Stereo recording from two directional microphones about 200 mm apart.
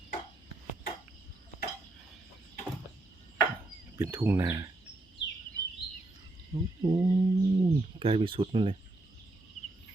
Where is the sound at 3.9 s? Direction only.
10° right (ahead or behind).